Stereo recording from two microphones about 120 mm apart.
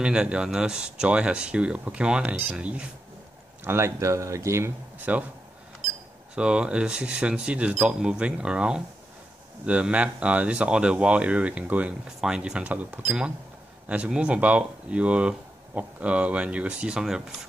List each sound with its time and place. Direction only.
0.0 s speech: 10° right (ahead or behind)
3.6 s speech: 20° right (ahead or behind)
6.3 s speech: 10° right (ahead or behind)